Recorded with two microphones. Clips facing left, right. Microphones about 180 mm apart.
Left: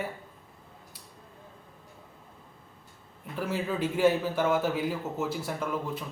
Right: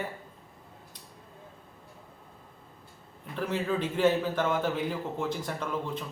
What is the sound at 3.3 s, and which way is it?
A man's voice, 5° left (ahead or behind).